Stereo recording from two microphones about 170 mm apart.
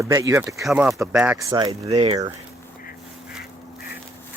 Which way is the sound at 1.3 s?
25° right (ahead or behind).